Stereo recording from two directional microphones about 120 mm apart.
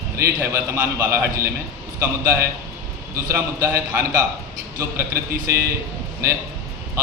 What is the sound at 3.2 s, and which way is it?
Speech, 25° right (ahead or behind).